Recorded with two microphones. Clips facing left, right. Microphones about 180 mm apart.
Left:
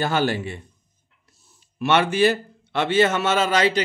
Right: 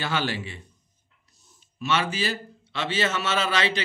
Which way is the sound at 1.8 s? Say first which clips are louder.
Left 8 dB; 60° left (ahead or behind).